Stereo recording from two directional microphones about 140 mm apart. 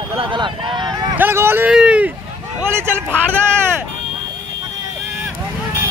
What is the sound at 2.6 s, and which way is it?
Vehicle, 15° right (ahead or behind).